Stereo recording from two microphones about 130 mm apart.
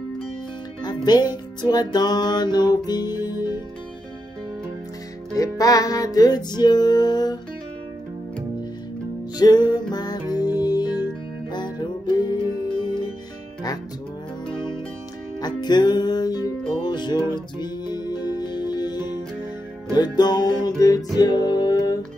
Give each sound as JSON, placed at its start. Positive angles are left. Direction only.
{"t": 0.8, "sound": "music", "side_deg": 35}
{"t": 5.4, "sound": "music", "side_deg": 25}
{"t": 9.4, "sound": "music", "side_deg": 35}
{"t": 15.4, "sound": "music", "side_deg": 35}